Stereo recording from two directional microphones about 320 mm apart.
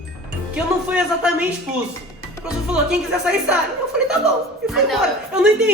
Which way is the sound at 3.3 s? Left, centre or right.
Centre.